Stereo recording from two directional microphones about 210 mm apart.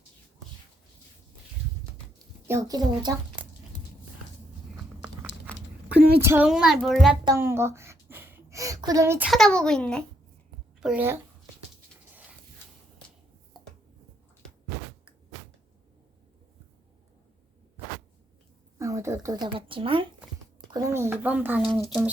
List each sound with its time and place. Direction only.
2.5 s speech: 15° right (ahead or behind)
6.2 s a child's voice: 10° right (ahead or behind)
7.3 s a sound: 10° right (ahead or behind); by 10.0 s 5° left (ahead or behind)
10.8 s a woman's voice: 5° right (ahead or behind)
18.8 s a child's voice: 15° right (ahead or behind)